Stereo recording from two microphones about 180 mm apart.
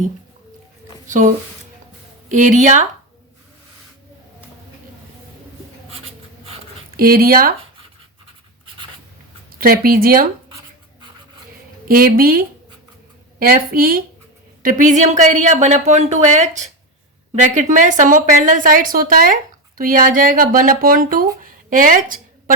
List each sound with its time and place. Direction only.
1.0 s speech: 45° right (ahead or behind)
2.3 s a woman's voice: 45° right (ahead or behind)
6.9 s a woman's voice: 55° right (ahead or behind)
9.6 s a woman's voice: 55° right (ahead or behind)
11.9 s a woman's voice: 50° right (ahead or behind)
21.4 s a sound: 50° right (ahead or behind)